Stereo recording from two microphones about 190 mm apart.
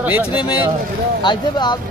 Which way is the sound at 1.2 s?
25° left (ahead or behind).